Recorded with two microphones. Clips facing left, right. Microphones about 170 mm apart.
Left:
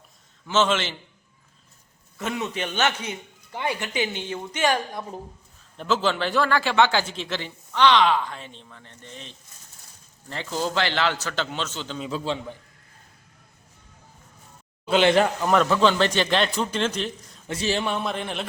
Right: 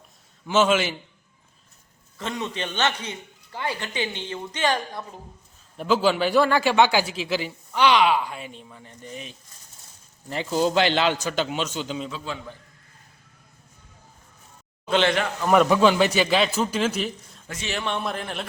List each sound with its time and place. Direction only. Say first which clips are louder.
0.4 s a man's voice: right 2 dB; 10° right (ahead or behind)
2.1 s a man's voice: left 1 dB; 10° left (ahead or behind)
5.7 s a man's voice: right 3 dB; 10° right (ahead or behind)
12.1 s a man's voice: left 6 dB; 30° left (ahead or behind)
15.4 s a man's voice: right 7 dB; 10° right (ahead or behind)
17.5 s a man's voice: left 6 dB; 30° left (ahead or behind)
17.8 s speech: left 1 dB; centre (ahead or behind)